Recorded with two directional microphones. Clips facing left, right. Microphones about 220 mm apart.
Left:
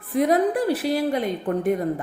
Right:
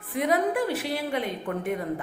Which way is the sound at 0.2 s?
35° left (ahead or behind).